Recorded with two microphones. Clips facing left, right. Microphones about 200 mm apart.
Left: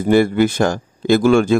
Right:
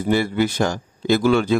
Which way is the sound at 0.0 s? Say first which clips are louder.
Left 6 dB; 50° left (ahead or behind).